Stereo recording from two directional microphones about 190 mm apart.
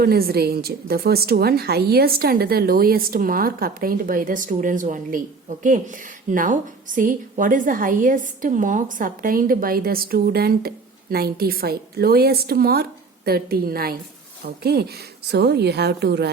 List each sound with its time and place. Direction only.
0.0 s a woman's voice: 55° right (ahead or behind)